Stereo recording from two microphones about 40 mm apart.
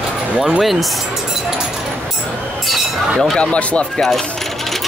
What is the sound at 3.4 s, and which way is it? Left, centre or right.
Speech, left.